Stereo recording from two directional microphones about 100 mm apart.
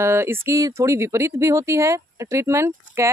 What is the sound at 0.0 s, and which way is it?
Speech, 25° right (ahead or behind).